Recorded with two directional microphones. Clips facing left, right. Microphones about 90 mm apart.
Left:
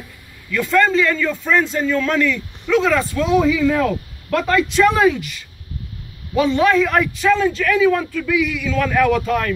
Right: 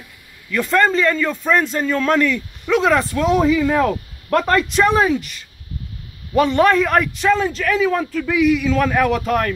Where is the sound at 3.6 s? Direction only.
40° right (ahead or behind).